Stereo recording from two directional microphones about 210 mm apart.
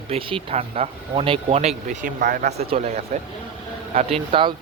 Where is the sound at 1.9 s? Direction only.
40° right (ahead or behind).